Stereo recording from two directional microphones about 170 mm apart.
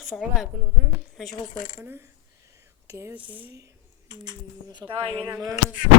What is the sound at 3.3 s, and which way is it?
Speech, 10° right (ahead or behind).